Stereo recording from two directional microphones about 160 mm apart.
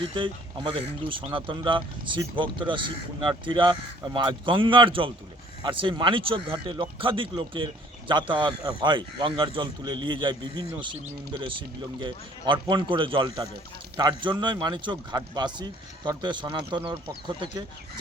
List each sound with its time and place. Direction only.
0.2 s speech: 30° right (ahead or behind)